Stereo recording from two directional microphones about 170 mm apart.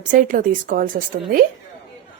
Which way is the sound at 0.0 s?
50° right (ahead or behind).